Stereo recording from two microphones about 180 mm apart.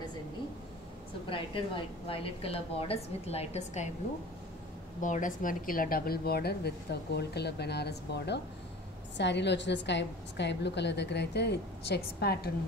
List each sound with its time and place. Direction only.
1.3 s a woman's voice: 30° left (ahead or behind)
5.0 s a woman's voice: 45° left (ahead or behind); by 12.4 s 60° left (ahead or behind)